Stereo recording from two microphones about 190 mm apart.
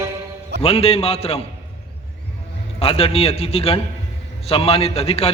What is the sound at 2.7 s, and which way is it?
A man's voice, 30° left (ahead or behind).